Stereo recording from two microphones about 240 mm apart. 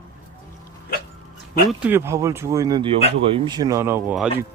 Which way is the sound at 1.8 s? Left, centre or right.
Centre.